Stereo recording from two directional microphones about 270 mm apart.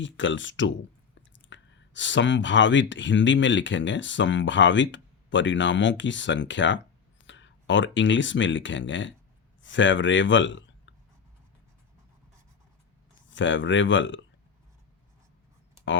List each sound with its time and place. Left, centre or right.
0.0 s speech: left
13.3 s speech: left